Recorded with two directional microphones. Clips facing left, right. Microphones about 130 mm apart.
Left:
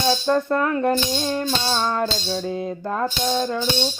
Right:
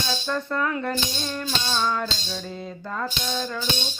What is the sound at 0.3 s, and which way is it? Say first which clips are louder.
Speech: left 4 dB; 50° left (ahead or behind).